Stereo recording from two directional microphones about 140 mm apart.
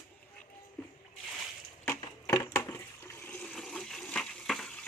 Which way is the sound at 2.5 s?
20° left (ahead or behind).